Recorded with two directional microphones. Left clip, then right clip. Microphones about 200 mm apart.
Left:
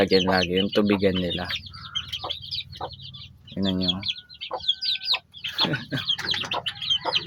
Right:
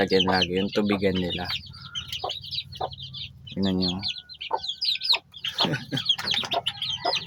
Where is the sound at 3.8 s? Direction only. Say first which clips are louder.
Left 2 dB; 15° right (ahead or behind).